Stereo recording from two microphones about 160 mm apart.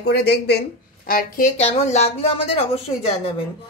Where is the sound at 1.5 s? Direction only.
40° left (ahead or behind).